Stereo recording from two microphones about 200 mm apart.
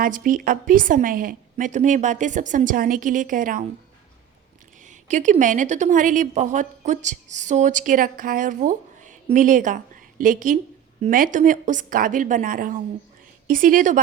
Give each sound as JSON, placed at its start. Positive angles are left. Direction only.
{"t": 0.0, "sound": "a woman's voice", "side_deg": -45}
{"t": 4.8, "sound": "a woman's voice", "side_deg": -40}